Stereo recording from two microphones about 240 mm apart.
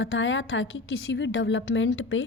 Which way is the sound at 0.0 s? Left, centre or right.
Left.